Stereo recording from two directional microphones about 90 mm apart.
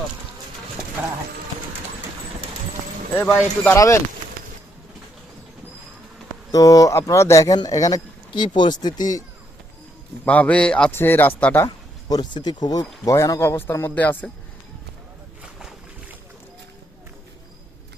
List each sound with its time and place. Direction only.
3.3 s speech: 20° left (ahead or behind)
3.8 s speech: 35° left (ahead or behind)
6.5 s speech: 40° left (ahead or behind)
8.3 s speech: 60° left (ahead or behind); by 9.2 s 45° left (ahead or behind)
10.2 s a man's voice: 15° left (ahead or behind)
10.9 s speech: 25° left (ahead or behind)
12.0 s speech: 50° left (ahead or behind)
13.4 s speech: 25° left (ahead or behind)